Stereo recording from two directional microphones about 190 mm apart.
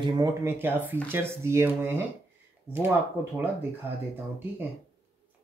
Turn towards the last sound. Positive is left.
turn(degrees=-10)  # may be behind; listen again after turning